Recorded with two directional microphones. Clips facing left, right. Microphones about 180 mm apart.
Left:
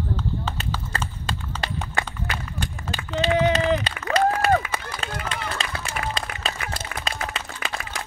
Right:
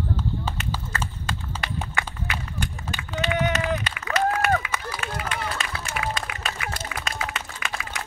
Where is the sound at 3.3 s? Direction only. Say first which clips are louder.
Left 5 dB; 35° left (ahead or behind).